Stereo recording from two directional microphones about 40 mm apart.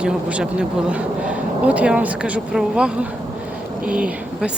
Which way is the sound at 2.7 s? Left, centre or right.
Right.